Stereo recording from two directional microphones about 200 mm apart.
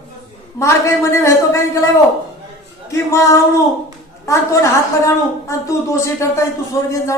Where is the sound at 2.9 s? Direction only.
15° left (ahead or behind).